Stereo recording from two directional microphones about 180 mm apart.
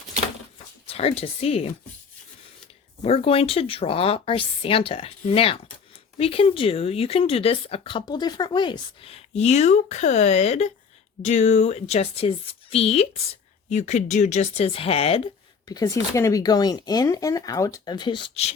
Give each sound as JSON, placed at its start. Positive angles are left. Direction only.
{"t": 0.9, "sound": "speech", "side_deg": 35}
{"t": 3.0, "sound": "speech", "side_deg": 30}
{"t": 15.6, "sound": "speech", "side_deg": 20}